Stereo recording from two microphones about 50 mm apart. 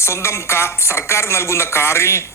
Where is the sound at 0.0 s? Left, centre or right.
Left.